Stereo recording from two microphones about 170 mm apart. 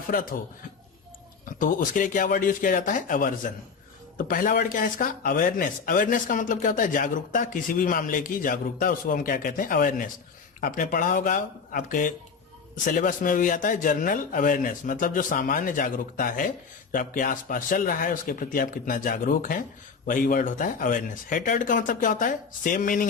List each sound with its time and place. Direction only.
0.1 s a man's voice: 55° left (ahead or behind)
1.5 s speech: 55° left (ahead or behind)